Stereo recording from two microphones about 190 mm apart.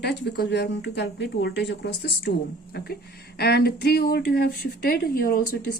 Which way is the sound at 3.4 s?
55° left (ahead or behind).